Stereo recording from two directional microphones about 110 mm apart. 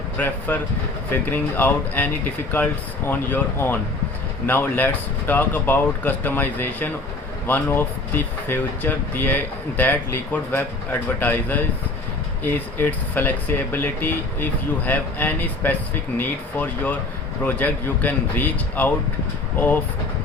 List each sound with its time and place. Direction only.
0.2 s speech: 15° left (ahead or behind)
3.1 s speech: 15° left (ahead or behind)